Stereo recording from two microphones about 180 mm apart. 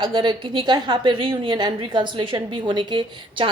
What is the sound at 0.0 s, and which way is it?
A woman's voice, 25° right (ahead or behind).